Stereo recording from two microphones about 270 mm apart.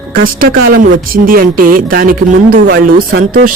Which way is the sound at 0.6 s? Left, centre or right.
Right.